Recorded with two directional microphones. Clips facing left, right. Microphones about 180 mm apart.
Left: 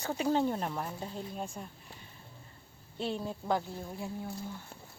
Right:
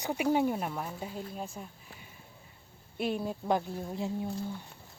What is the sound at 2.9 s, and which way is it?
Speech, 15° right (ahead or behind).